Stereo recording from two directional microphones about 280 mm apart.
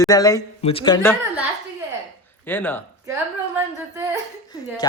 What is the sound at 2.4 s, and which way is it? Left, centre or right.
Speech, centre.